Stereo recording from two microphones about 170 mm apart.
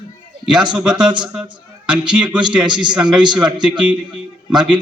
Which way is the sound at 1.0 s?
25° right (ahead or behind).